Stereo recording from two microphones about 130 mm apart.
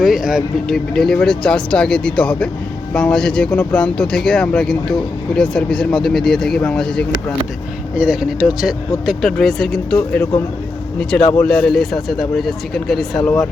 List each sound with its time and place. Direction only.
0.0 s speech: centre (ahead or behind)
7.9 s speech: 5° right (ahead or behind)
11.1 s speech: 10° left (ahead or behind)